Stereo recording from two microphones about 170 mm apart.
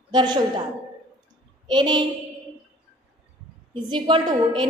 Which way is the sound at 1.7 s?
25° right (ahead or behind).